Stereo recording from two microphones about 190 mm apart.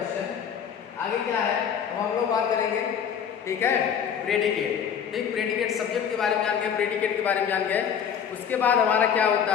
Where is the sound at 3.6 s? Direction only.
10° left (ahead or behind).